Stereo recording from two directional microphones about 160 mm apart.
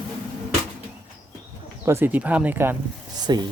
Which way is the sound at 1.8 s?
15° right (ahead or behind).